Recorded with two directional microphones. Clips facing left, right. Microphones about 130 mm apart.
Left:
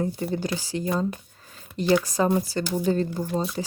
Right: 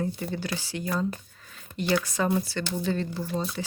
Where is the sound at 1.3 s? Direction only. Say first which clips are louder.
Left 1 dB; 35° left (ahead or behind).